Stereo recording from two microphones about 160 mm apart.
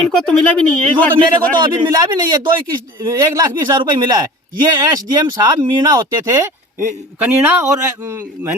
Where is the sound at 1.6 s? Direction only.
25° right (ahead or behind).